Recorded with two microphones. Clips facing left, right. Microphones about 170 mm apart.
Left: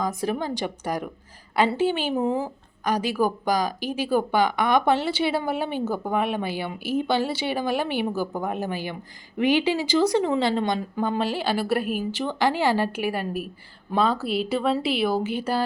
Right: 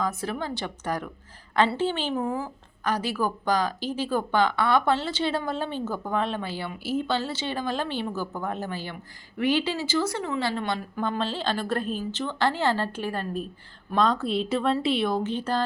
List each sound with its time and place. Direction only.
0.0 s speech: 15° left (ahead or behind)
2.1 s a woman's voice: 20° left (ahead or behind)
11.0 s speech: 10° left (ahead or behind)